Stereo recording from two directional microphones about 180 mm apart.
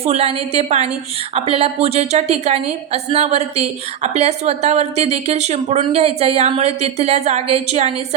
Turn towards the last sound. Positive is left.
turn(degrees=-40)  # may be behind; listen again after turning